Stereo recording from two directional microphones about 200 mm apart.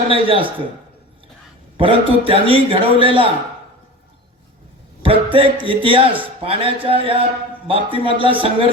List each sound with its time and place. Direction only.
0.1 s a man's voice: 25° right (ahead or behind)
1.7 s a man's voice: 25° right (ahead or behind)
5.0 s a man's voice: 25° right (ahead or behind)